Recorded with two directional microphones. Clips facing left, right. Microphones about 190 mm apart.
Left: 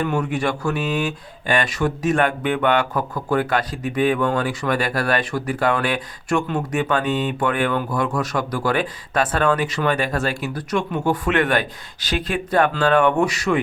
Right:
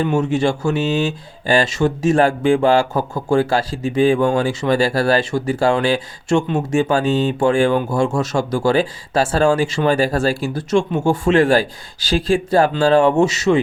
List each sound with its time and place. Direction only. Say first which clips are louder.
0.0 s speech: right 5 dB; 25° right (ahead or behind)